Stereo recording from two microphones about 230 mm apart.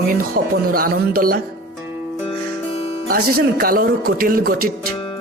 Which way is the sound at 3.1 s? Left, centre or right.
Right.